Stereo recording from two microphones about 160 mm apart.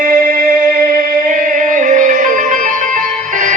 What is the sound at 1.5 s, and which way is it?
Music, 55° right (ahead or behind).